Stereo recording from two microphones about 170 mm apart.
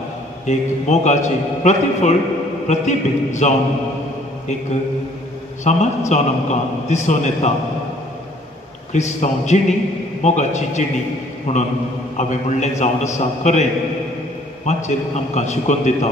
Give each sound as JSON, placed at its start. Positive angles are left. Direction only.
{"t": 0.5, "sound": "a man's voice", "side_deg": 45}
{"t": 5.6, "sound": "a man's voice", "side_deg": 40}
{"t": 8.9, "sound": "a man's voice", "side_deg": 45}